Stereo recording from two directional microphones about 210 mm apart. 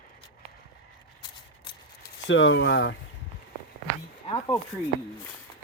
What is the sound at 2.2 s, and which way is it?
Speech, 65° left (ahead or behind).